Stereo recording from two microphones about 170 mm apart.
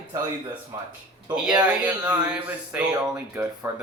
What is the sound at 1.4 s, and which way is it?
Speech, 5° right (ahead or behind).